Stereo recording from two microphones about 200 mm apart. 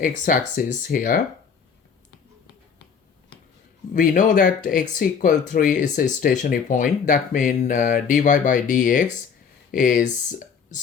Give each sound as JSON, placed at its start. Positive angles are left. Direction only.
{"t": 0.0, "sound": "speech", "side_deg": 45}
{"t": 3.9, "sound": "speech", "side_deg": 40}